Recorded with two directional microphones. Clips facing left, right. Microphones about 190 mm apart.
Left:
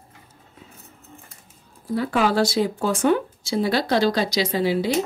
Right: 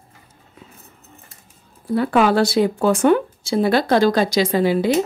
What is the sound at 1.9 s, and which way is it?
Speech, 60° right (ahead or behind).